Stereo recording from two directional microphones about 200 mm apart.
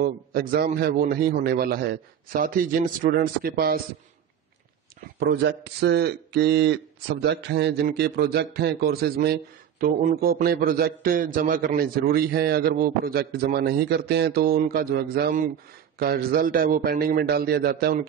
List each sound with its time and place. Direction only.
0.0 s speech: 50° right (ahead or behind)
5.2 s speech: 55° right (ahead or behind)